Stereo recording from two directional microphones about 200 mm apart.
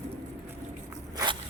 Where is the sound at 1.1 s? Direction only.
25° right (ahead or behind).